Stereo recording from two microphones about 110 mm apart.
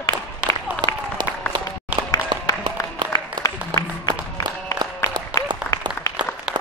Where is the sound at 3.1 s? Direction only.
35° left (ahead or behind).